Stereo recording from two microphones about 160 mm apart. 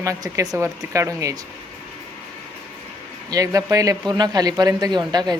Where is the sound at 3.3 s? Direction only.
20° right (ahead or behind).